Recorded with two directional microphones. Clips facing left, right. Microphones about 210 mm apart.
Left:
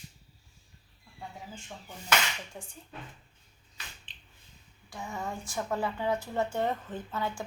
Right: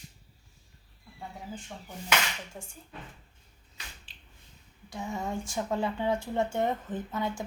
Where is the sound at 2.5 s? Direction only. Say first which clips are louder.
Right 1 dB; centre (ahead or behind).